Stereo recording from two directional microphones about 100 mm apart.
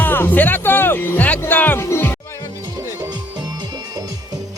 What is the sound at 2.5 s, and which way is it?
Music, 35° right (ahead or behind).